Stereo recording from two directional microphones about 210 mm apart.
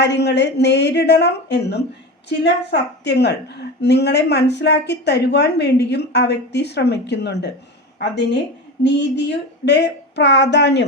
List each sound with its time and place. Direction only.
0.0 s a woman's voice: 55° left (ahead or behind)